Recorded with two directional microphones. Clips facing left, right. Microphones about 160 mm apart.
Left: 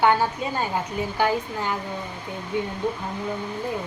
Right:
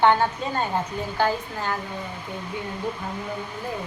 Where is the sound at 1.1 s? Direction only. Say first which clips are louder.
Even; 15° left (ahead or behind).